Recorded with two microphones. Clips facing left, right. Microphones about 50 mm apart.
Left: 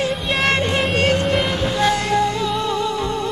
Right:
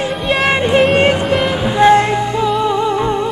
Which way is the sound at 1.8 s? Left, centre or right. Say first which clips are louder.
Right 8 dB; right.